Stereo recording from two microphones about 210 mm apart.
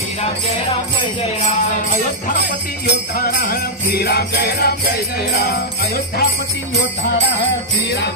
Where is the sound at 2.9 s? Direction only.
50° left (ahead or behind).